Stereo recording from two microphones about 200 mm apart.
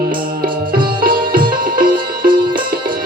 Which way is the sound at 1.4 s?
45° right (ahead or behind).